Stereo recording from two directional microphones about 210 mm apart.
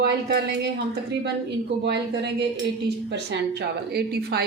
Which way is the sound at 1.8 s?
55° right (ahead or behind).